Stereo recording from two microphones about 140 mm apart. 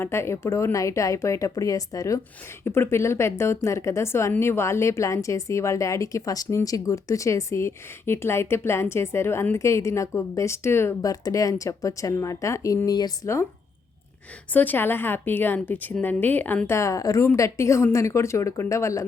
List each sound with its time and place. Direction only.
0.0 s a woman's voice: 20° left (ahead or behind)
14.5 s a woman's voice: 15° left (ahead or behind)